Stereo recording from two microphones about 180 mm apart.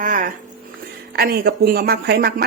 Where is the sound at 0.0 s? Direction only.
45° right (ahead or behind).